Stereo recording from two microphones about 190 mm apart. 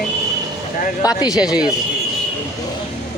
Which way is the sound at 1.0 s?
20° left (ahead or behind).